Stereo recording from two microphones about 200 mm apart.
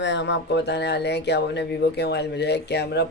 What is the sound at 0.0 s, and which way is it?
Speech, 60° left (ahead or behind).